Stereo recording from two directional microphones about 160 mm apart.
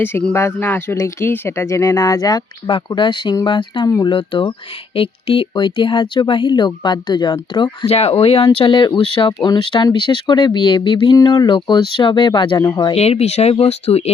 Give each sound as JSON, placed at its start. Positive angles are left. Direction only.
{"t": 0.0, "sound": "speech", "side_deg": 10}
{"t": 4.1, "sound": "speech", "side_deg": 30}
{"t": 7.9, "sound": "speech", "side_deg": 40}
{"t": 12.9, "sound": "speech", "side_deg": 40}